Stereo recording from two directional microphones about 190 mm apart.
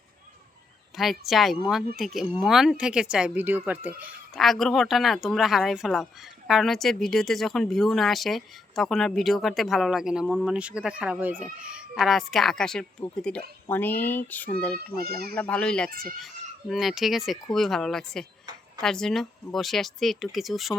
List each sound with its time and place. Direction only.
0.9 s speech: centre (ahead or behind)
4.4 s speech: centre (ahead or behind)
14.9 s speech: 50° right (ahead or behind)
15.4 s speech: 5° left (ahead or behind)
15.9 s speech: 50° right (ahead or behind)
16.1 s speech: centre (ahead or behind)